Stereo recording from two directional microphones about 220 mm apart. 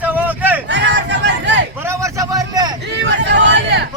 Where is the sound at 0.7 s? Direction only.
55° right (ahead or behind).